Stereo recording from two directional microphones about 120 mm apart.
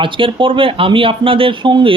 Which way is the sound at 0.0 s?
45° right (ahead or behind).